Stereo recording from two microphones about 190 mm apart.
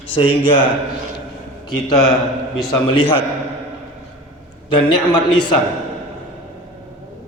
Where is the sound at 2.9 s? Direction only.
25° left (ahead or behind).